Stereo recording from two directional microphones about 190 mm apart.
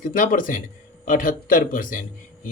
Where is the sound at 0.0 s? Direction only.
45° left (ahead or behind).